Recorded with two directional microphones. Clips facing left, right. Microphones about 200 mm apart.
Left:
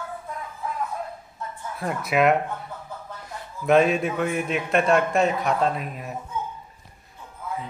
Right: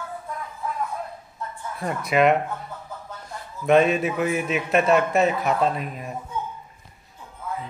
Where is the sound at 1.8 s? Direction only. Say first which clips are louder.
Right 1 dB; centre (ahead or behind).